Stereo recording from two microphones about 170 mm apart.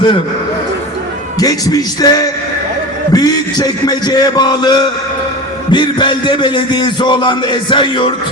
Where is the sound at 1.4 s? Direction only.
20° left (ahead or behind).